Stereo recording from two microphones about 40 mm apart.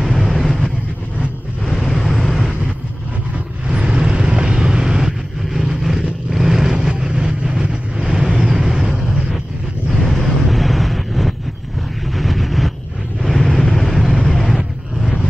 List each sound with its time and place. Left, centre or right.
0.0 s vehicle: centre
1.7 s vehicle: centre
3.6 s vehicle: right
6.7 s vehicle: right
9.8 s vehicle: centre
14.2 s a sound: centre